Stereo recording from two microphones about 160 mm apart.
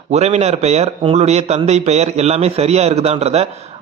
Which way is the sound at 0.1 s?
40° right (ahead or behind).